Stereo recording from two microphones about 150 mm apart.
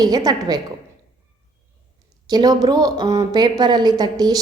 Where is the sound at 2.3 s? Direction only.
25° right (ahead or behind).